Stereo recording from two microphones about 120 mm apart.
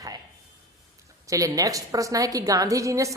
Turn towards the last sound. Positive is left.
turn(degrees=-25)  # may be behind; listen again after turning